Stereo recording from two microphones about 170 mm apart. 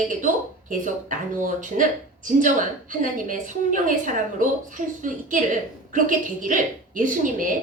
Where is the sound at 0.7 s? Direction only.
50° right (ahead or behind).